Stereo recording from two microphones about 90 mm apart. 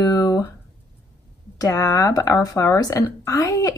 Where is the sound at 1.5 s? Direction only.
35° left (ahead or behind).